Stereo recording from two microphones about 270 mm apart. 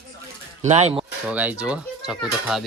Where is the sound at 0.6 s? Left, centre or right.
Right.